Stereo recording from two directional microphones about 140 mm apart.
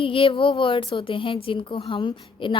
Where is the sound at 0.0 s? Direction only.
40° left (ahead or behind).